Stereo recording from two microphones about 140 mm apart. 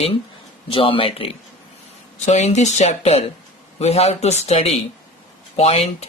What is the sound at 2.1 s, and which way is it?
Speech, 55° left (ahead or behind).